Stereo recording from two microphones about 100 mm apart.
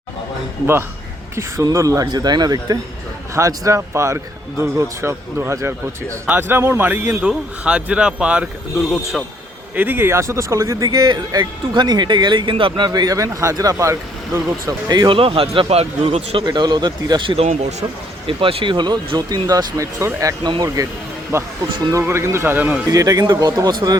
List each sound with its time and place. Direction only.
1.4 s speech: 30° right (ahead or behind)
7.3 s speech: 10° right (ahead or behind)
9.7 s speech: 20° right (ahead or behind)
14.8 s speech: 45° right (ahead or behind)
15.2 s speech: 65° right (ahead or behind)
16.5 s speech: 45° right (ahead or behind)
17.3 s speech: 90° right
18.3 s speech: 60° right (ahead or behind); by 20.3 s 30° right (ahead or behind)
20.4 s speech: 45° right (ahead or behind)
21.3 s speech: 30° right (ahead or behind)
22.9 s speech: 40° right (ahead or behind)